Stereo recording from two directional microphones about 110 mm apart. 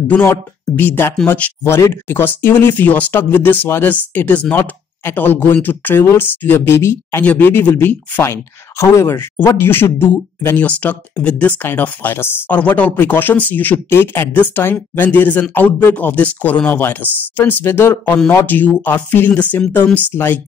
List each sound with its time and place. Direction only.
0.1 s speech: 15° left (ahead or behind)